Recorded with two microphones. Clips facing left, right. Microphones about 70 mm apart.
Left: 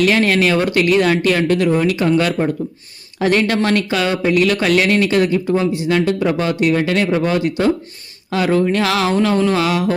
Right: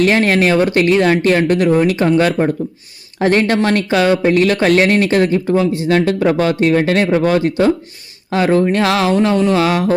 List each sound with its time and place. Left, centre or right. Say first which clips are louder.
0.0 s speech: right 2 dB; right
6.1 s speech: right 3 dB; right